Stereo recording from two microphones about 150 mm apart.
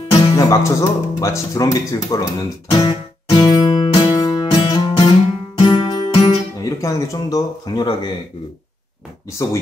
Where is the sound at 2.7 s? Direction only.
30° left (ahead or behind).